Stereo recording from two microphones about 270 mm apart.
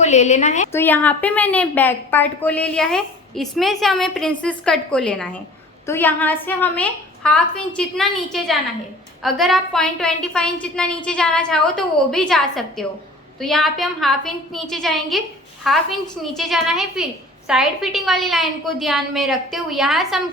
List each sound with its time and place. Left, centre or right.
0.0 s a woman's voice: left
0.7 s a woman's voice: centre